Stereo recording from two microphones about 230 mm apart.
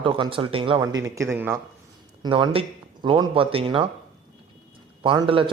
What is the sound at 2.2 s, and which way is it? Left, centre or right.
Speech, right.